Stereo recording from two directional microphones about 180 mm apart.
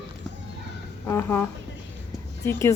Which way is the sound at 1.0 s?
10° left (ahead or behind).